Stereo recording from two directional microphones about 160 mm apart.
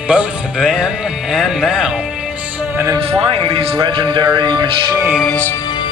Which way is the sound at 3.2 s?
35° right (ahead or behind).